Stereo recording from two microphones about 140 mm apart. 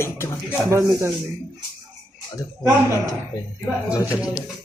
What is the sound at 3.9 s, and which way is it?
Speech, 10° right (ahead or behind).